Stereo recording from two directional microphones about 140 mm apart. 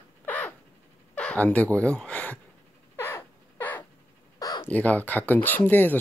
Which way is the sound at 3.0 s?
15° left (ahead or behind).